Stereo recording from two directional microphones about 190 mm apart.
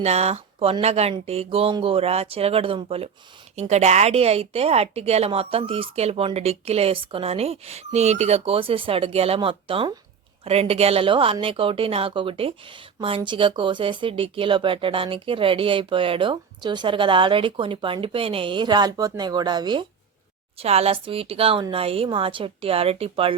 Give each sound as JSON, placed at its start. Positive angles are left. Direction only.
{"t": 0.0, "sound": "a woman's voice", "side_deg": -35}
{"t": 20.6, "sound": "a woman's voice", "side_deg": -35}